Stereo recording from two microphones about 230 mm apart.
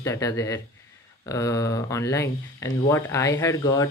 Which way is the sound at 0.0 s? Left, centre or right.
Centre.